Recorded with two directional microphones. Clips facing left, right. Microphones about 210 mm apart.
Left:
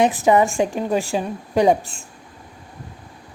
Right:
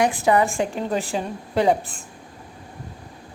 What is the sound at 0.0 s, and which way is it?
A woman's voice, 20° left (ahead or behind).